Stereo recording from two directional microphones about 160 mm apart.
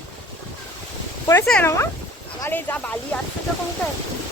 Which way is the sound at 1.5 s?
10° left (ahead or behind).